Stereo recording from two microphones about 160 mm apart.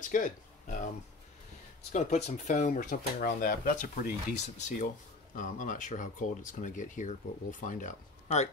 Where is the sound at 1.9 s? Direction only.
45° left (ahead or behind).